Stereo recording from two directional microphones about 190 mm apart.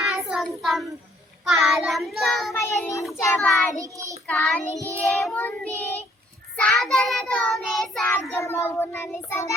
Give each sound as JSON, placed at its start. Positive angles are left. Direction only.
{"t": 0.0, "sound": "child singing", "side_deg": 0}
{"t": 2.5, "sound": "child singing", "side_deg": 15}
{"t": 3.8, "sound": "child singing", "side_deg": -15}
{"t": 4.3, "sound": "child singing", "side_deg": 5}